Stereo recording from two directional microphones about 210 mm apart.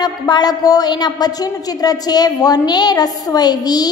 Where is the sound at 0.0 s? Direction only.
20° left (ahead or behind).